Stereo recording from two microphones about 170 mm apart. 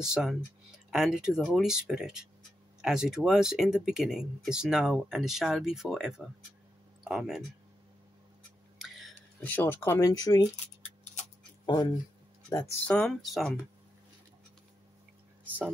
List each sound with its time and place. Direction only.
0.0 s speech: 5° right (ahead or behind)
8.7 s speech: centre (ahead or behind); by 10.5 s 20° left (ahead or behind)
11.6 s speech: 25° left (ahead or behind); by 13.5 s centre (ahead or behind)